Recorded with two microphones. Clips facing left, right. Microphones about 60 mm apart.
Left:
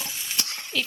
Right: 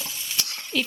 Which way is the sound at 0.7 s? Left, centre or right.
Centre.